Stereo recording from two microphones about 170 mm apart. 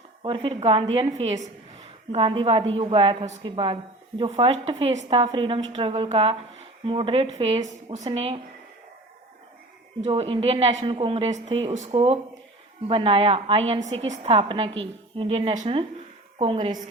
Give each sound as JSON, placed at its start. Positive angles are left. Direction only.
{"t": 0.2, "sound": "a woman's voice", "side_deg": -30}
{"t": 10.0, "sound": "a woman's voice", "side_deg": -35}